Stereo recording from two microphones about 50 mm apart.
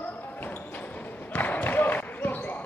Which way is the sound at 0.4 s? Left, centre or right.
Left.